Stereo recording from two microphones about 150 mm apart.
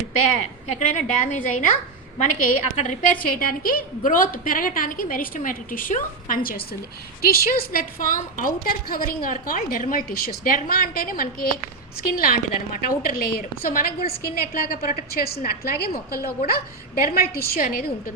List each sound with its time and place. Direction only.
0.8 s a woman's voice: 60° left (ahead or behind)
7.2 s a woman's voice: 80° left